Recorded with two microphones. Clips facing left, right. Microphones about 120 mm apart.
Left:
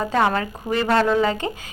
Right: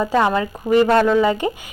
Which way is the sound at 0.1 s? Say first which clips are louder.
Right 3 dB; 15° right (ahead or behind).